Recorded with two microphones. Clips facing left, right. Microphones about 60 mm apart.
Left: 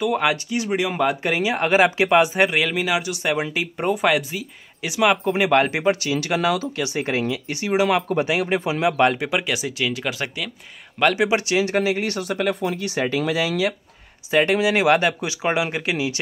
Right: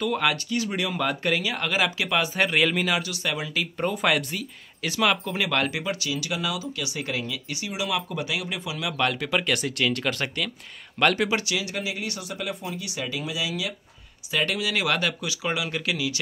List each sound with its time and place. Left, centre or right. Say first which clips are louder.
0.0 s speech: left 4 dB; centre
2.5 s speech: left 2 dB; centre
3.0 s speech: left 6 dB; left
4.0 s speech: left 4 dB; centre; by 6.7 s left
6.8 s speech: left 7 dB; left
9.3 s speech: left 1 dB; centre
11.2 s speech: left 7 dB; left
11.7 s speech: left 10 dB; left
14.3 s speech: left 8 dB; left